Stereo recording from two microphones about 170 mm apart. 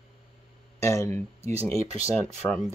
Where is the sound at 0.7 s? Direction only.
15° left (ahead or behind).